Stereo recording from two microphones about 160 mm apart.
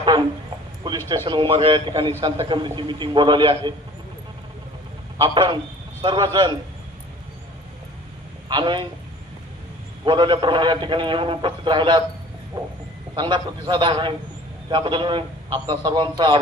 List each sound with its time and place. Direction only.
1.0 s a man's voice: 30° right (ahead or behind)
5.1 s a man's voice: 30° right (ahead or behind)
8.4 s a man's voice: 30° right (ahead or behind)
10.1 s a man's voice: 30° right (ahead or behind)